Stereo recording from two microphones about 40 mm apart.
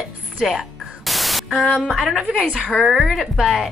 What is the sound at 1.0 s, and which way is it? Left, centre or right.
Static, centre.